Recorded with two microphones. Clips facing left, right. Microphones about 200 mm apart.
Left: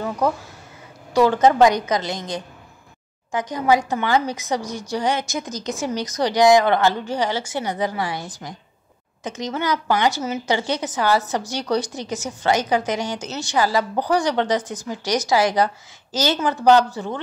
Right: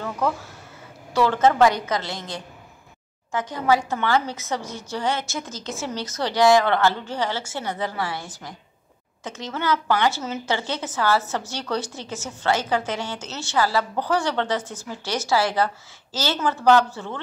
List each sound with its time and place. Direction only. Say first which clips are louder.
1.1 s a woman's voice: left 3 dB; 15° left (ahead or behind)